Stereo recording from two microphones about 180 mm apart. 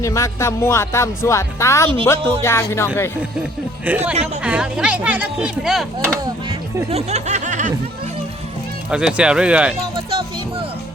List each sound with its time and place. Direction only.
0.0 s speech: 15° left (ahead or behind)
3.8 s speech: 10° right (ahead or behind)
6.2 s speech: 20° right (ahead or behind)
6.9 s snicker: 40° right (ahead or behind)
8.9 s speech: 5° right (ahead or behind)
9.8 s music: 25° right (ahead or behind)